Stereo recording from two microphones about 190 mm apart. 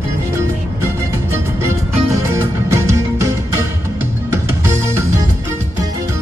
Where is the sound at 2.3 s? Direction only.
15° right (ahead or behind).